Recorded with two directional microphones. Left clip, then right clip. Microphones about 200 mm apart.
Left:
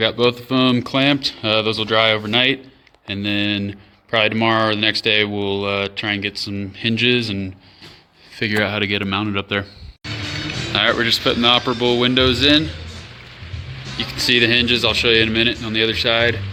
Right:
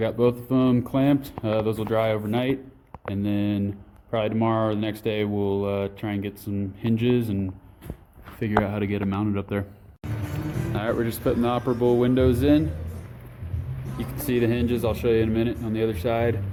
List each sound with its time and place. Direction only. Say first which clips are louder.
0.0 s speech: left 6 dB; 5° left (ahead or behind)
10.7 s music: left 11 dB; centre (ahead or behind)
11.0 s speech: left 9 dB; centre (ahead or behind)
14.0 s speech: left 9 dB; centre (ahead or behind)